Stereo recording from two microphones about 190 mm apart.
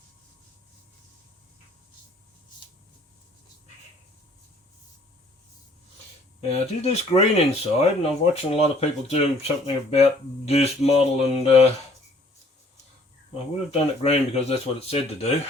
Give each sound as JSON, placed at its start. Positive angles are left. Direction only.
{"t": 6.5, "sound": "speech", "side_deg": 35}
{"t": 13.7, "sound": "speech", "side_deg": 35}